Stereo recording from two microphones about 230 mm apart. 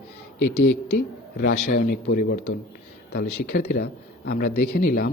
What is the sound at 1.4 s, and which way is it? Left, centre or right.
Speech, left.